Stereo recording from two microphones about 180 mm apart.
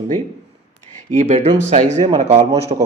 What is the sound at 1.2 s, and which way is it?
Speech, 35° right (ahead or behind).